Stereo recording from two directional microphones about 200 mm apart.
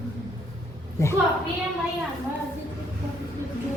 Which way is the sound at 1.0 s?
15° left (ahead or behind).